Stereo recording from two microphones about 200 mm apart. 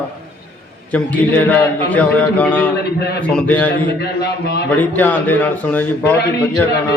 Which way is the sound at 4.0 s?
55° left (ahead or behind).